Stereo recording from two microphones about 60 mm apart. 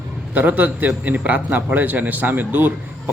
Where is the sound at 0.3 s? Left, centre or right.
Right.